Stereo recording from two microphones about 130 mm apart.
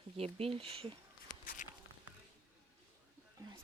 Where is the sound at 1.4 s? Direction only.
90° left.